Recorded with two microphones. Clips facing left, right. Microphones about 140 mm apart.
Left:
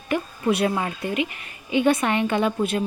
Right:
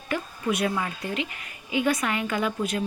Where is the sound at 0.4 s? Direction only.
30° left (ahead or behind).